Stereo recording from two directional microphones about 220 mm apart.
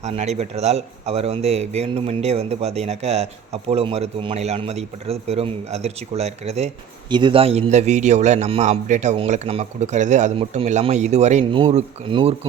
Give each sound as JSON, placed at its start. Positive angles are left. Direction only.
{"t": 0.0, "sound": "a man's voice", "side_deg": -30}